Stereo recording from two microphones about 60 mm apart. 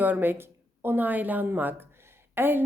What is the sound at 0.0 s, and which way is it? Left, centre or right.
A woman's voice, right.